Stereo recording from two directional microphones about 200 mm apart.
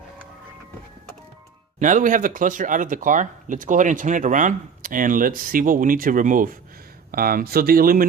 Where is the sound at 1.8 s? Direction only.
40° right (ahead or behind).